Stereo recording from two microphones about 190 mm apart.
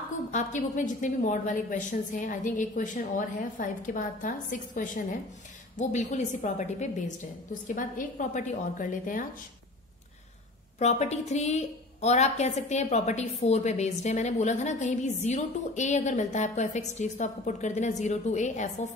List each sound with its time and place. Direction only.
0.3 s a woman's voice: 40° left (ahead or behind)
10.8 s a woman's voice: 35° left (ahead or behind)